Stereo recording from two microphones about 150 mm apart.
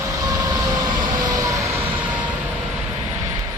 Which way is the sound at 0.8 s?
25° right (ahead or behind).